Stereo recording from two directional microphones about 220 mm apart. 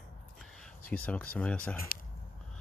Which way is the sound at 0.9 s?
5° left (ahead or behind).